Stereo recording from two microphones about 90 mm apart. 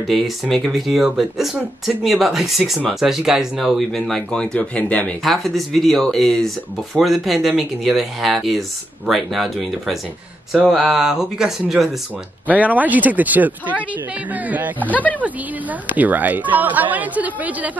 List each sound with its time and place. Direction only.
0.0 s speech: centre (ahead or behind)
5.2 s speech: centre (ahead or behind)
12.4 s speech: 15° right (ahead or behind)
14.8 s speech: 20° left (ahead or behind)
15.9 s a woman's voice: 20° right (ahead or behind)